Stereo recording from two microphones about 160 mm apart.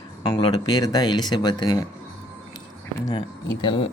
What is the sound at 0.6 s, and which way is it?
Speech, 25° left (ahead or behind).